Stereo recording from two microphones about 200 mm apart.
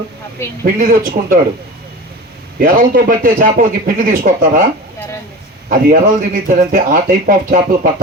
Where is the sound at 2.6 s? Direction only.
45° right (ahead or behind).